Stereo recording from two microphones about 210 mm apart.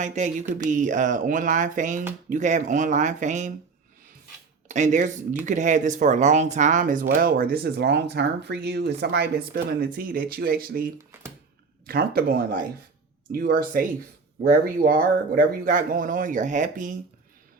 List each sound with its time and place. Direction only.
0.0 s speech: 35° right (ahead or behind)
4.7 s speech: 35° right (ahead or behind)